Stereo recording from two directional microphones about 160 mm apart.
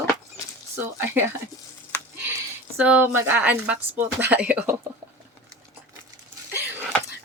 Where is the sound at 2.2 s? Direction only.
10° right (ahead or behind).